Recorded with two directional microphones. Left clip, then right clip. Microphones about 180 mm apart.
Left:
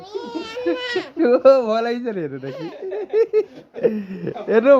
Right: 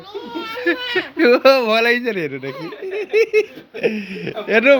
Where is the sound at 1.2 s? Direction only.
15° left (ahead or behind).